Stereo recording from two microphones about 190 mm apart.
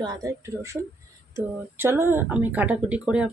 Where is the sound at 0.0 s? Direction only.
20° right (ahead or behind).